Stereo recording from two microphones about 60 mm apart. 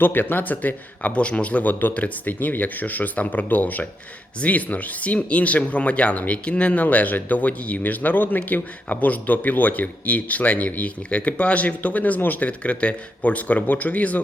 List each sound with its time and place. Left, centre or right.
0.0 s speech: left